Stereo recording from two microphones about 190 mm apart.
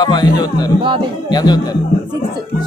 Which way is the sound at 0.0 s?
20° left (ahead or behind).